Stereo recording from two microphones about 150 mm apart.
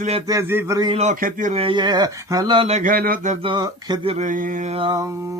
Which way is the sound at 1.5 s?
35° right (ahead or behind).